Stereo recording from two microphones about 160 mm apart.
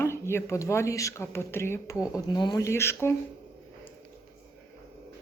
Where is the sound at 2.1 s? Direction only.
25° left (ahead or behind).